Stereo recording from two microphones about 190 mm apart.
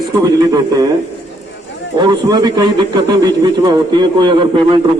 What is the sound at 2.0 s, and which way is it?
A man's voice, 20° right (ahead or behind).